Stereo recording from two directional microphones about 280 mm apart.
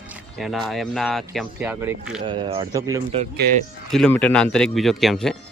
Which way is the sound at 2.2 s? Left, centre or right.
Centre.